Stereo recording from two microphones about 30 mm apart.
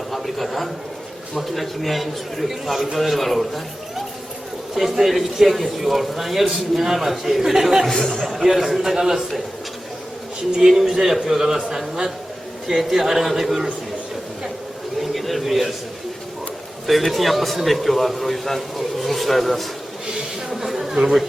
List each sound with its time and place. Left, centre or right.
0.1 s a sound: centre
1.4 s a man's voice: centre
7.9 s speech: left
8.3 s a man's voice: centre
10.6 s a man's voice: centre
12.9 s a man's voice: centre
15.1 s a sound: centre
16.8 s a man's voice: centre
20.5 s a man's voice: centre
20.9 s speech: right